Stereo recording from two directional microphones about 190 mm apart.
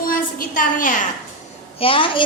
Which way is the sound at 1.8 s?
30° left (ahead or behind).